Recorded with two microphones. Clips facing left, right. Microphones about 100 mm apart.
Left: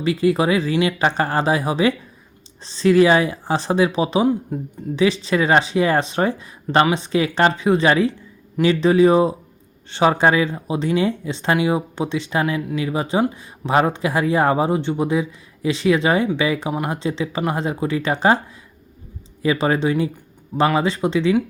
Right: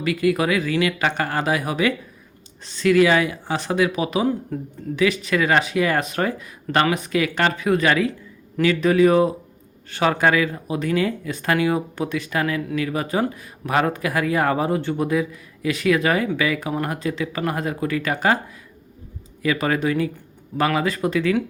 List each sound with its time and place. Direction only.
0.0 s a man's voice: 30° left (ahead or behind)
19.4 s a man's voice: 25° left (ahead or behind)